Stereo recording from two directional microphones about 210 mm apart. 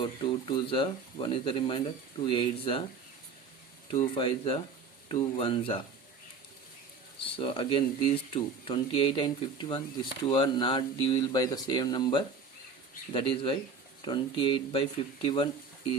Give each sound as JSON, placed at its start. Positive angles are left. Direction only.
{"t": 0.0, "sound": "speech", "side_deg": 25}
{"t": 3.8, "sound": "speech", "side_deg": 25}
{"t": 7.2, "sound": "speech", "side_deg": 25}